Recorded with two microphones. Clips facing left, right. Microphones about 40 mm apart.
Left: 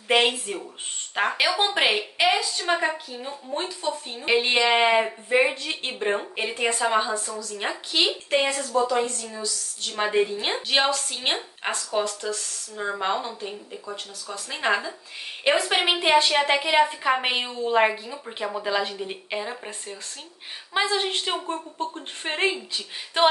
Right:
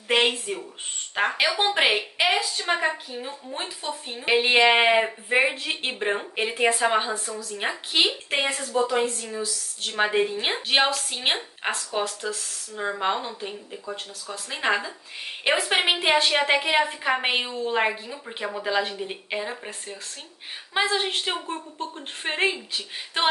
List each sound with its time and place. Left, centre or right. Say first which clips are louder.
0.1 s a woman's voice: left 1 dB; centre; by 4.9 s right
4.9 s a woman's voice: left 1 dB; centre; by 10.0 s right
10.0 s a woman's voice: left 1 dB; centre
20.7 s a woman's voice: even; centre